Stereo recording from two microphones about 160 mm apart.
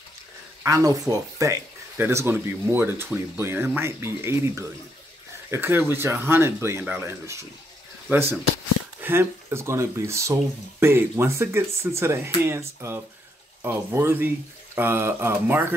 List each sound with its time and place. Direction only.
0.7 s speech: 20° right (ahead or behind)